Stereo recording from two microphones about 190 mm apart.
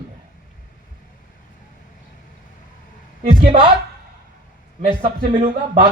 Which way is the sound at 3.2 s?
30° right (ahead or behind).